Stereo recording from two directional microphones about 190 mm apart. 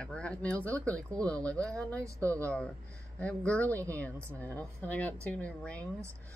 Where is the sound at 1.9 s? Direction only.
15° right (ahead or behind).